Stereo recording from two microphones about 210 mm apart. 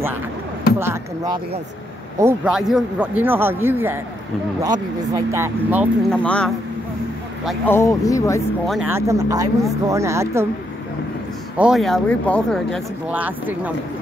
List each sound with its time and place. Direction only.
0.7 s a man's voice: 15° right (ahead or behind)
2.5 s a man's voice: centre (ahead or behind)
6.1 s speech: 5° left (ahead or behind)
7.6 s speech: 10° left (ahead or behind)
8.6 s speech: centre (ahead or behind)
8.9 s a man's voice: 15° right (ahead or behind)
11.5 s speech: 5° right (ahead or behind)